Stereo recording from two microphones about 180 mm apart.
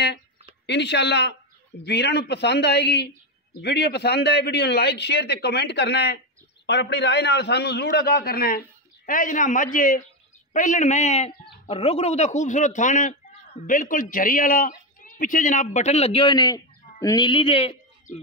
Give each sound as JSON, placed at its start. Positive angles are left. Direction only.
{"t": 0.7, "sound": "a man's voice", "side_deg": 70}
{"t": 18.1, "sound": "speech", "side_deg": 45}